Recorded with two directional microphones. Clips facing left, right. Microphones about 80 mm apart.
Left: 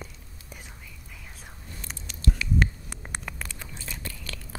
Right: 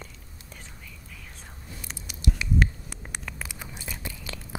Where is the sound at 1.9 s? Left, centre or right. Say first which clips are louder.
Left 1 dB; centre.